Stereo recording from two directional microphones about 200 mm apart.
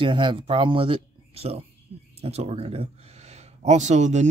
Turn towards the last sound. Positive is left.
turn(degrees=-35)  # may be behind; listen again after turning